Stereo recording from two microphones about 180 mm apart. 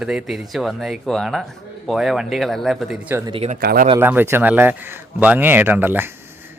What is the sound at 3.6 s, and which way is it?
Speech, 60° right (ahead or behind).